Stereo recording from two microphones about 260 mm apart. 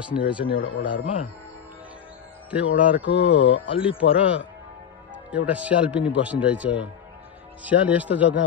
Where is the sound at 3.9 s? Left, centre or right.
Left.